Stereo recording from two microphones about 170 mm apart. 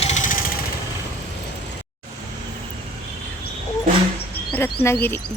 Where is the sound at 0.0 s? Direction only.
45° left (ahead or behind).